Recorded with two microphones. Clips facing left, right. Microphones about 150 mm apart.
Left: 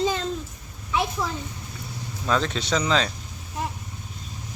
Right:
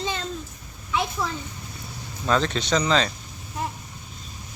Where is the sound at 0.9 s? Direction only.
5° left (ahead or behind).